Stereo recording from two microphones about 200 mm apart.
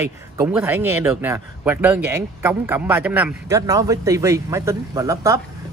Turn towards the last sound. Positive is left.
turn(degrees=-15)  # may be behind; listen again after turning